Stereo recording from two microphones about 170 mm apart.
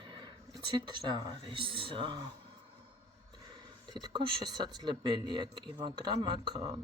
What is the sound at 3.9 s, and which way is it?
Speech, 25° right (ahead or behind).